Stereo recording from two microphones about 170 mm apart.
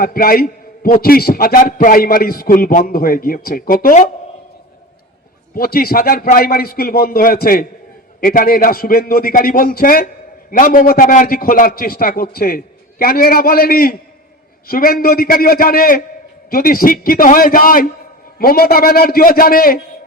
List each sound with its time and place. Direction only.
0.0 s a man's voice: 60° left (ahead or behind)
5.5 s a man's voice: 60° left (ahead or behind)